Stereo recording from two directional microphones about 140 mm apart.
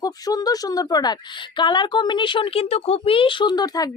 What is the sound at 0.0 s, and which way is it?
Speech, 25° left (ahead or behind).